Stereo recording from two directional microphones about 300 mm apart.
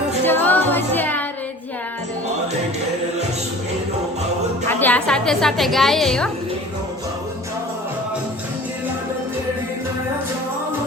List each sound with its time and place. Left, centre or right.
0.3 s music: centre
4.7 s a woman's voice: centre